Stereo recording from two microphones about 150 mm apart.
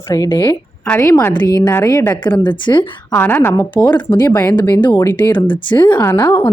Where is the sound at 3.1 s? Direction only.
15° left (ahead or behind).